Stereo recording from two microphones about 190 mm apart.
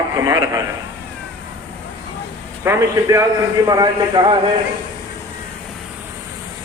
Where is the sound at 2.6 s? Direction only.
15° right (ahead or behind).